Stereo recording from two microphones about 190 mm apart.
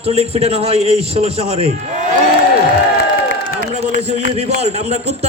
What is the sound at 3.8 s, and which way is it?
A man's voice, 40° right (ahead or behind).